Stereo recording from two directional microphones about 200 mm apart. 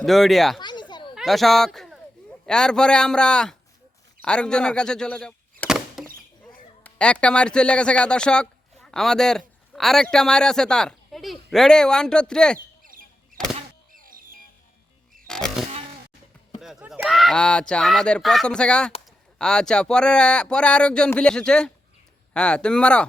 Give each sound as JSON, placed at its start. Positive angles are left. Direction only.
{"t": 0.0, "sound": "speech", "side_deg": 0}
{"t": 0.6, "sound": "a sound", "side_deg": 20}
{"t": 1.1, "sound": "speech", "side_deg": 0}
{"t": 4.2, "sound": "a sound", "side_deg": 5}
{"t": 6.4, "sound": "speech", "side_deg": 5}
{"t": 15.3, "sound": "music", "side_deg": 0}
{"t": 16.6, "sound": "speech", "side_deg": -5}